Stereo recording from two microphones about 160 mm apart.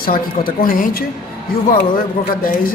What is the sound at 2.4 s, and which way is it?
Speech, 60° left (ahead or behind).